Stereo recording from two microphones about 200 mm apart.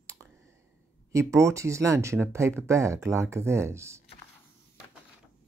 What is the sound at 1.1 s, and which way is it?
Speech, 15° right (ahead or behind).